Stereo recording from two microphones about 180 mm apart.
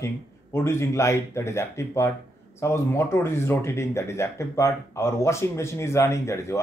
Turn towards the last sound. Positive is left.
turn(degrees=15)  # may be behind; listen again after turning